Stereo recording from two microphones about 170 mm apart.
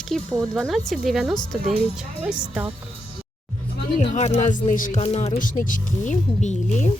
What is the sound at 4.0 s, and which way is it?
Speech, 40° left (ahead or behind).